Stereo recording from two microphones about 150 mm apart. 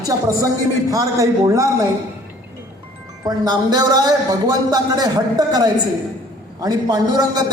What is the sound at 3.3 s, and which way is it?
A man's voice, 25° right (ahead or behind).